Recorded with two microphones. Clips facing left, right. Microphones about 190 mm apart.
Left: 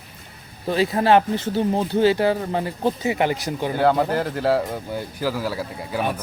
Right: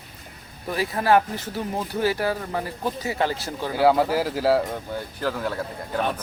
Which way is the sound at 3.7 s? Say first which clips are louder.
Right 1 dB; 5° right (ahead or behind).